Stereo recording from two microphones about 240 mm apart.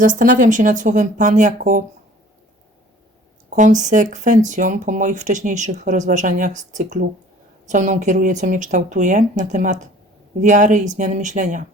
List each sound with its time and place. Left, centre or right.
0.0 s speech: right
3.5 s speech: right